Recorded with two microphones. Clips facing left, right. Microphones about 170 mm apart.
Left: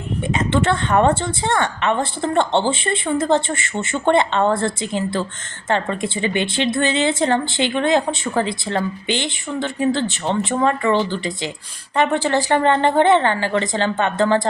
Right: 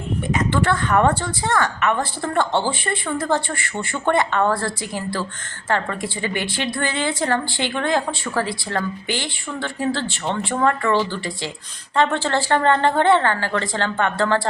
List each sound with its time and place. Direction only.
0.3 s a woman's voice: 25° left (ahead or behind)